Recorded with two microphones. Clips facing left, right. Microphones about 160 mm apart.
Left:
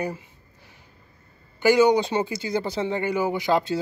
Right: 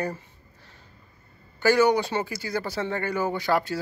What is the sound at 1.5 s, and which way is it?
Speech, 15° left (ahead or behind).